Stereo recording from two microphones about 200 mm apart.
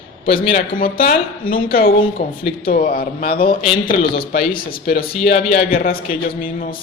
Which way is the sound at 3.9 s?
25° left (ahead or behind).